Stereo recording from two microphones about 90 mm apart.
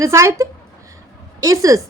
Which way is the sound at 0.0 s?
35° right (ahead or behind).